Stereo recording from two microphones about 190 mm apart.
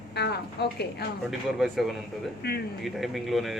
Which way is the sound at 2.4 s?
55° left (ahead or behind).